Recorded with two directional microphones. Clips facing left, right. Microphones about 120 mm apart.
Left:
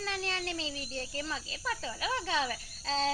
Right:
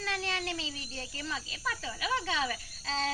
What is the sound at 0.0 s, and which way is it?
Speech, 30° left (ahead or behind).